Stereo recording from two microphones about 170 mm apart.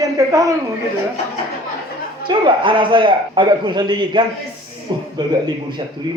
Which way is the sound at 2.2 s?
30° right (ahead or behind).